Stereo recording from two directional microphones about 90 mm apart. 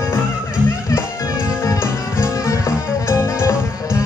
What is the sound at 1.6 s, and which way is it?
Music, 35° left (ahead or behind).